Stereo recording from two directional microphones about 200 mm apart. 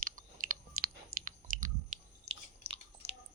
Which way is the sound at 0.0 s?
45° right (ahead or behind).